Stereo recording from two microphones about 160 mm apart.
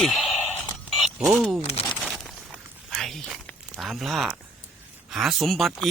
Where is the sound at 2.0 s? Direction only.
Centre (ahead or behind).